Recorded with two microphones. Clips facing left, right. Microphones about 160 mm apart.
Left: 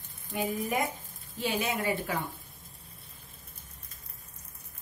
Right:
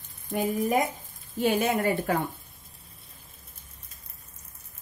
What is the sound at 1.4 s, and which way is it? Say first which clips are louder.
Speech: right 7 dB; 50° right (ahead or behind).